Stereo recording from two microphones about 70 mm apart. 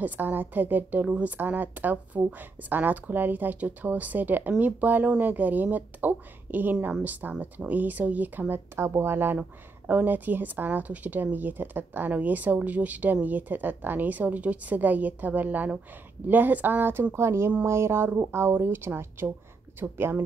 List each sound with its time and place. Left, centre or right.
0.0 s a woman's voice: right
8.7 s a woman's voice: right